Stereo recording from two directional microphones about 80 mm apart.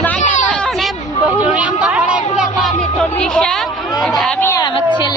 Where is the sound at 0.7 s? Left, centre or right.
Centre.